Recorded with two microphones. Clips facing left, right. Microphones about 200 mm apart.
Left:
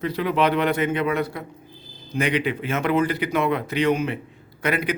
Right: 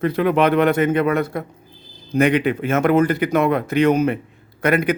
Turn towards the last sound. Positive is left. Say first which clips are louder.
# right 6 dB
turn(degrees=-50)  # may be behind; listen again after turning